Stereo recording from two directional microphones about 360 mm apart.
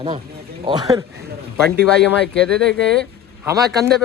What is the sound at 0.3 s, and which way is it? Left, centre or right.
Speech, centre.